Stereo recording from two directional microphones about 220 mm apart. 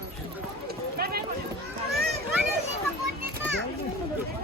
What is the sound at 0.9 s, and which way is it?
Clip-clop, 45° right (ahead or behind).